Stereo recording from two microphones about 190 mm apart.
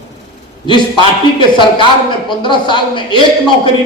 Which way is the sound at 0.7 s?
25° left (ahead or behind).